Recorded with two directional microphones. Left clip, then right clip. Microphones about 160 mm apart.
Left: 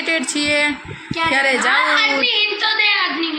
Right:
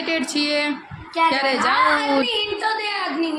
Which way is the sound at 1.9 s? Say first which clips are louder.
Left 3 dB; 35° right (ahead or behind).